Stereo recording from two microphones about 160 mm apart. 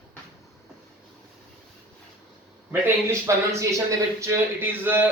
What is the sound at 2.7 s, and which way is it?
A man's voice, 15° right (ahead or behind).